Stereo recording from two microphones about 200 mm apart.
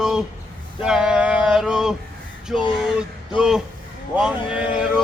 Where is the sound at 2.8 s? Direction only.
5° right (ahead or behind).